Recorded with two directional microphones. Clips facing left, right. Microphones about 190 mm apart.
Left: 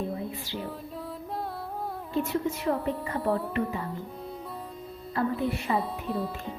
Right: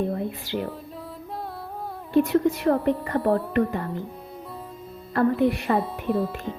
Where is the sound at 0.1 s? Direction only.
60° right (ahead or behind).